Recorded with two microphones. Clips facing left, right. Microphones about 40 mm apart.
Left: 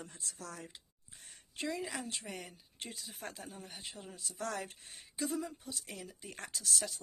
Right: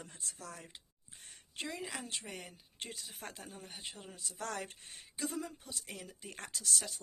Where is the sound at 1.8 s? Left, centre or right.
Right.